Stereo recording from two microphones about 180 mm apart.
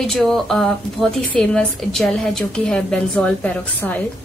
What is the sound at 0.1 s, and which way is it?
A woman's voice, centre (ahead or behind).